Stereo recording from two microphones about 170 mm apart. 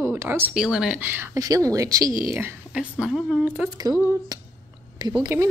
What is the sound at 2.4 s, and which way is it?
Speech, 5° right (ahead or behind).